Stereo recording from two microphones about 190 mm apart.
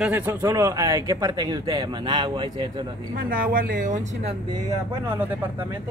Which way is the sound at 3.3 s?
50° right (ahead or behind).